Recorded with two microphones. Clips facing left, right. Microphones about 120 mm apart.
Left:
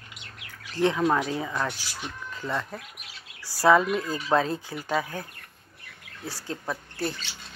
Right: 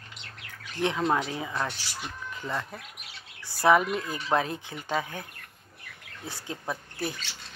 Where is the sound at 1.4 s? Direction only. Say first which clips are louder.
Left 2 dB; 20° right (ahead or behind).